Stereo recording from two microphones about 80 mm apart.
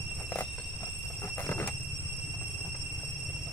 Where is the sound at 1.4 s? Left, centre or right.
Left.